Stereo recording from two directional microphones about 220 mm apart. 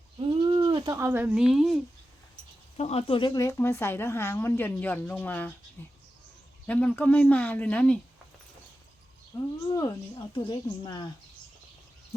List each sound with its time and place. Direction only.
0.4 s speech: 20° right (ahead or behind); by 1.8 s centre (ahead or behind)
2.7 s speech: 30° left (ahead or behind); by 7.9 s 5° left (ahead or behind)
9.3 s a woman's voice: 15° left (ahead or behind)